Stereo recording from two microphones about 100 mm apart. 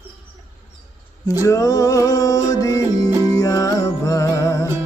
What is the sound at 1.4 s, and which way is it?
Music, 35° left (ahead or behind).